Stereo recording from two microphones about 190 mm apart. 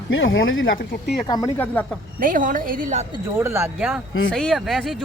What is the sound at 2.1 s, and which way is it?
Speech, 45° right (ahead or behind).